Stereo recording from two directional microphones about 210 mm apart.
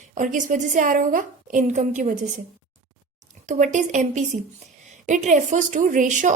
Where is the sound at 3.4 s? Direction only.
35° right (ahead or behind).